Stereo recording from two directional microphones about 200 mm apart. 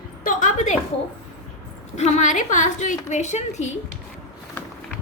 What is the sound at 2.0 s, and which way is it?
A woman's voice, 35° left (ahead or behind).